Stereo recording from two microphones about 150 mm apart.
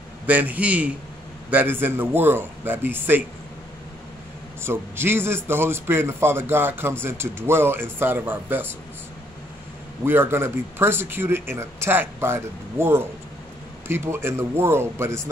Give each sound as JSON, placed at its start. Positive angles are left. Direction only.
{"t": 0.3, "sound": "a man's voice", "side_deg": -10}
{"t": 4.6, "sound": "a man's voice", "side_deg": -15}
{"t": 10.0, "sound": "a man's voice", "side_deg": -15}